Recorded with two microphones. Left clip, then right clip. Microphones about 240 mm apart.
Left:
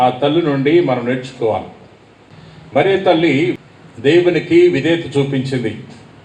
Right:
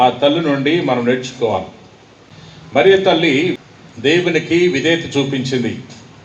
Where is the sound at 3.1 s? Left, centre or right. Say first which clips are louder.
Even; right.